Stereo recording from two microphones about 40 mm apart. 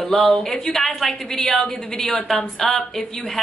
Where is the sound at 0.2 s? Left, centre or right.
Centre.